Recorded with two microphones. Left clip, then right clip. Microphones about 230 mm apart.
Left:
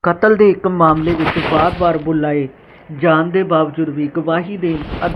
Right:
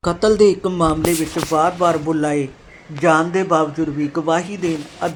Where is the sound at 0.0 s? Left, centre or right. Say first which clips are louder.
Left 3 dB; centre.